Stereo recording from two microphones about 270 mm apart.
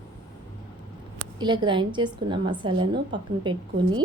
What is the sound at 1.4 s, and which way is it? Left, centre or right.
A woman's voice, centre.